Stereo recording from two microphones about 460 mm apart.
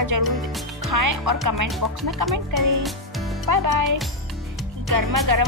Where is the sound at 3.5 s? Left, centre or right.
Right.